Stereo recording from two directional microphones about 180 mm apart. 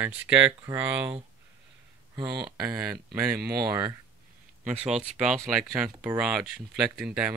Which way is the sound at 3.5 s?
20° right (ahead or behind).